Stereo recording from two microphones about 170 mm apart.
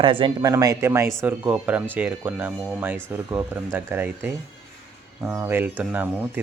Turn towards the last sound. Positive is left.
turn(degrees=-10)  # may be behind; listen again after turning